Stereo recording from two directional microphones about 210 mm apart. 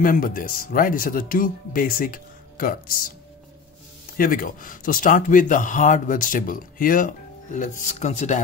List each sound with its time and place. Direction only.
0.0 s speech: 40° left (ahead or behind)
4.2 s speech: 40° left (ahead or behind)